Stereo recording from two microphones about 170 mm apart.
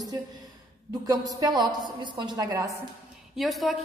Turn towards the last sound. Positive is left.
turn(degrees=0)  # may be behind; listen again after turning